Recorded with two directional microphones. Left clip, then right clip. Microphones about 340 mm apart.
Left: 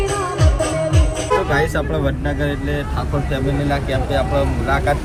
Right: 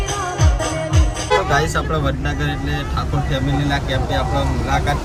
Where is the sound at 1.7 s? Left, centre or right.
Centre.